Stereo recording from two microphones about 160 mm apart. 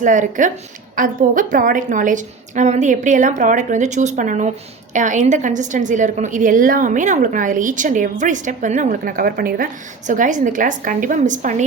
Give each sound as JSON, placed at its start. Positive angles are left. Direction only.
{"t": 0.0, "sound": "a woman's voice", "side_deg": -50}
{"t": 10.1, "sound": "a woman's voice", "side_deg": -50}